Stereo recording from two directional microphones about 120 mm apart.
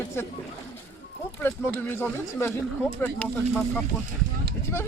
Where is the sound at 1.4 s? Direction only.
20° left (ahead or behind).